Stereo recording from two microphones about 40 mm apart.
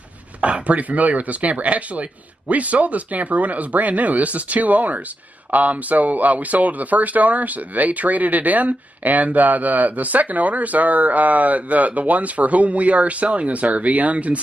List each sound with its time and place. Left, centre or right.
0.4 s speech: right